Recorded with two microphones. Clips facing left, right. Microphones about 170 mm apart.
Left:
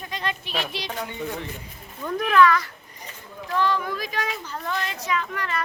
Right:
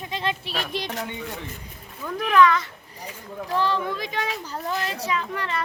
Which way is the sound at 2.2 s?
15° right (ahead or behind).